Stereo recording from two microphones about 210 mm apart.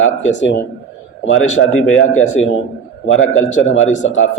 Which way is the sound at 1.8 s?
80° left.